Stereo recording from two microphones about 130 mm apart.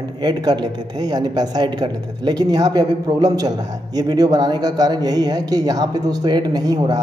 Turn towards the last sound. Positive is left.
turn(degrees=-30)  # may be behind; listen again after turning